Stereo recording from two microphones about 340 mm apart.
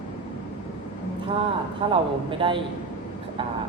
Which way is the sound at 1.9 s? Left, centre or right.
Centre.